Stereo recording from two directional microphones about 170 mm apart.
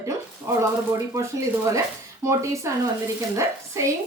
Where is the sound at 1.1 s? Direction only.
20° right (ahead or behind).